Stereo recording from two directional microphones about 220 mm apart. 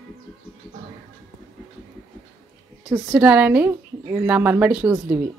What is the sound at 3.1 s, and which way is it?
Speech, 5° right (ahead or behind).